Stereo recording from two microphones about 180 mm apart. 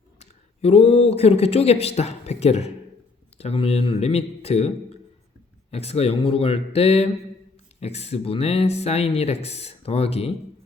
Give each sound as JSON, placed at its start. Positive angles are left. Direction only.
{"t": 0.2, "sound": "speech", "side_deg": 35}